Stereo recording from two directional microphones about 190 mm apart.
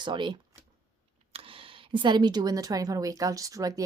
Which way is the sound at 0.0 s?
25° right (ahead or behind).